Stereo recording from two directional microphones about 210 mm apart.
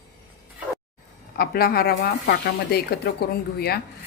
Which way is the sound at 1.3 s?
45° left (ahead or behind).